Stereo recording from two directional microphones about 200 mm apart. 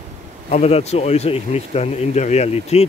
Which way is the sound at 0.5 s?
30° left (ahead or behind).